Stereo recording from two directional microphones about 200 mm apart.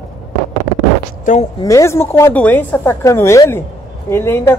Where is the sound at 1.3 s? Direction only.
40° left (ahead or behind).